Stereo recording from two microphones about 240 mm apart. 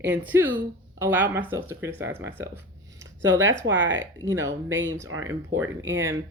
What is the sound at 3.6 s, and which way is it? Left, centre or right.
Speech, right.